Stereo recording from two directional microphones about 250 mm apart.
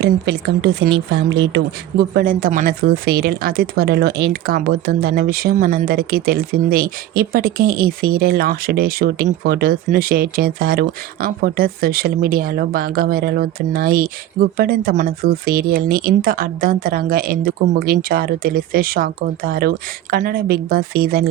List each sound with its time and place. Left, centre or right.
0.0 s speech: right
2.1 s speech: right